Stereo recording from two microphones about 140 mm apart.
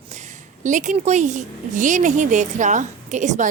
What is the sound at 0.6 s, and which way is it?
A woman's voice, 60° right (ahead or behind).